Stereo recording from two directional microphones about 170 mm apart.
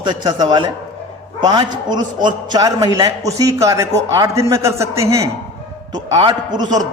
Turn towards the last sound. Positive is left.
turn(degrees=-25)  # may be behind; listen again after turning